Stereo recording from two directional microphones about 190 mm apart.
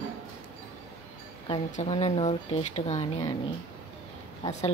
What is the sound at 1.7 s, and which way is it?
Speech, 30° left (ahead or behind).